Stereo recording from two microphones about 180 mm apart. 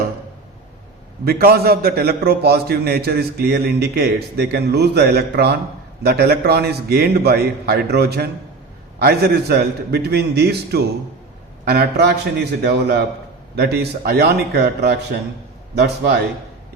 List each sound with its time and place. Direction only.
1.2 s a man's voice: 60° right (ahead or behind)